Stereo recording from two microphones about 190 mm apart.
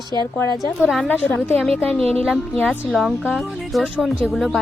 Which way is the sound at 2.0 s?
30° right (ahead or behind).